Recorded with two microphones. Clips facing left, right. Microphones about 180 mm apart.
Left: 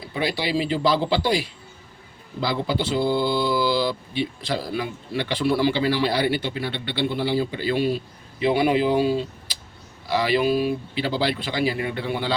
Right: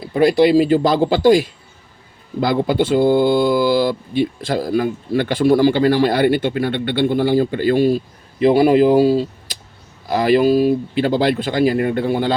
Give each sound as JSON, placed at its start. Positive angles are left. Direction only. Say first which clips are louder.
{"t": 0.3, "sound": "speech", "louder": "right 13 dB", "side_deg": -45}